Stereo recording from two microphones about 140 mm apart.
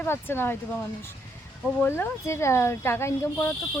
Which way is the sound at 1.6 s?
15° left (ahead or behind).